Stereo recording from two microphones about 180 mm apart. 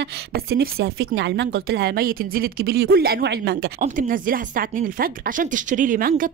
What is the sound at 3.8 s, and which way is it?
Speech, 50° right (ahead or behind).